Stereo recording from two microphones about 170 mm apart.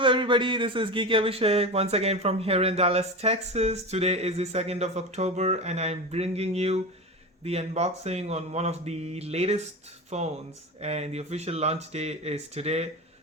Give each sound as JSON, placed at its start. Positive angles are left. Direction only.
{"t": 0.0, "sound": "speech", "side_deg": -30}